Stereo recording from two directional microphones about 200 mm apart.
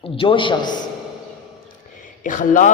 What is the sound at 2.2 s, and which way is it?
Speech, 40° left (ahead or behind).